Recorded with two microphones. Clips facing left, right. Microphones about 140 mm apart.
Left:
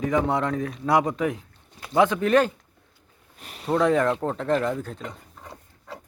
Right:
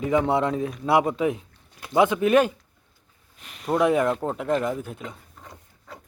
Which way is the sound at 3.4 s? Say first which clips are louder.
Left 4 dB; 40° left (ahead or behind).